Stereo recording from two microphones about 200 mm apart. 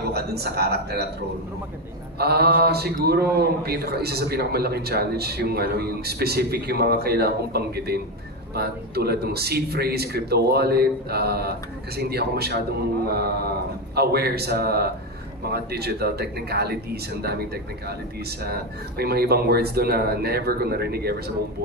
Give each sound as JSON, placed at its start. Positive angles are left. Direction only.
{"t": 0.1, "sound": "a man's voice", "side_deg": -50}
{"t": 2.1, "sound": "a man's voice", "side_deg": -50}